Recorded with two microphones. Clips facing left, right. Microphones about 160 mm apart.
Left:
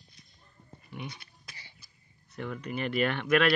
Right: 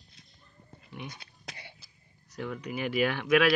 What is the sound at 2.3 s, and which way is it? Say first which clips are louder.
Speech: even; centre (ahead or behind).